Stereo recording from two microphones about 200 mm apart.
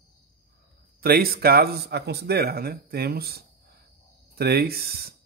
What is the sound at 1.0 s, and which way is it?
Speech, 50° right (ahead or behind).